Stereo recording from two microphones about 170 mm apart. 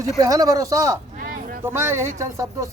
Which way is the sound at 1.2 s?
55° right (ahead or behind).